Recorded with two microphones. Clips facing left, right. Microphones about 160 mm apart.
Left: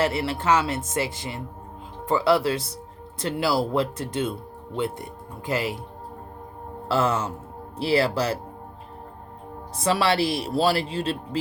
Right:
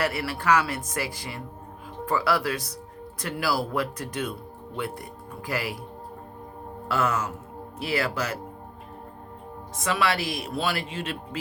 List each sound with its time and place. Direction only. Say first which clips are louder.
0.0 s speech: left 3 dB; 25° left (ahead or behind)
6.8 s speech: left 3 dB; 30° left (ahead or behind)
9.7 s speech: left 4 dB; 35° left (ahead or behind)